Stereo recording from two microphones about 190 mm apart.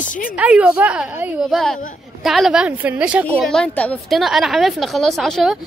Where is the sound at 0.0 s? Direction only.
45° left (ahead or behind).